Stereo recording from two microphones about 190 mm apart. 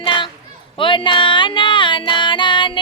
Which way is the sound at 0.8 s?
25° left (ahead or behind).